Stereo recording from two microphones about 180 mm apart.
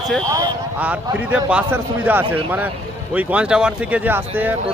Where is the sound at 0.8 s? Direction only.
5° right (ahead or behind).